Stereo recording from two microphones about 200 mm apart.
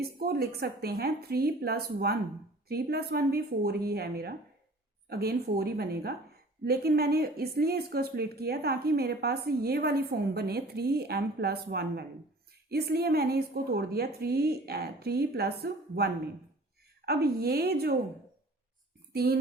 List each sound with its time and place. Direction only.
0.2 s a woman's voice: 50° right (ahead or behind)
19.1 s a woman's voice: 50° right (ahead or behind)